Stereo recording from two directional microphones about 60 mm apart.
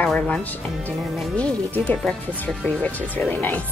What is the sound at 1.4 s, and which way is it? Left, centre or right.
Speech, left.